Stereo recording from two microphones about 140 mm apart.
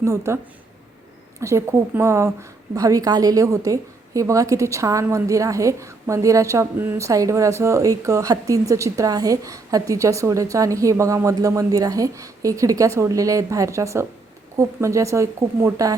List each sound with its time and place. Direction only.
0.0 s a woman's voice: 20° right (ahead or behind)
1.4 s a woman's voice: 20° right (ahead or behind)